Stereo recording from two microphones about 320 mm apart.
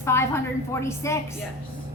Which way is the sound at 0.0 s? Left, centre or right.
Centre.